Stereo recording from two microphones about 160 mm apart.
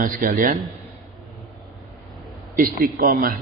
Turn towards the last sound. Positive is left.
turn(degrees=-60)  # may be behind; listen again after turning